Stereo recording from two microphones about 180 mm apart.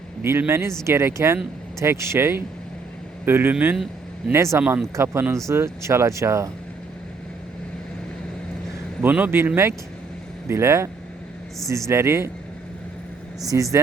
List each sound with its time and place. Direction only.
0.2 s speech: 10° right (ahead or behind)
9.0 s speech: 10° right (ahead or behind)
10.5 s speech: 15° right (ahead or behind)
11.9 s speech: 15° right (ahead or behind)
13.5 s speech: 20° right (ahead or behind)